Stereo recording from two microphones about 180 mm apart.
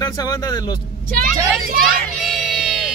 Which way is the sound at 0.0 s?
20° left (ahead or behind).